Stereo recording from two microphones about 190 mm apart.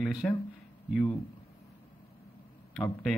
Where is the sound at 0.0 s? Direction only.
5° right (ahead or behind).